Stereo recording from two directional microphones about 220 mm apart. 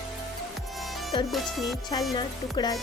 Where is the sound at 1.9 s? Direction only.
20° left (ahead or behind).